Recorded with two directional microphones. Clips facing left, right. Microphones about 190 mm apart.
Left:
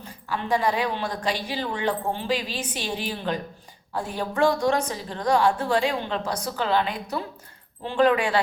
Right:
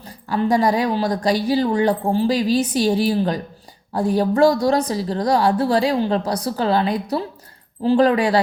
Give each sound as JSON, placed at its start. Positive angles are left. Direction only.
{"t": 0.0, "sound": "a woman's voice", "side_deg": -40}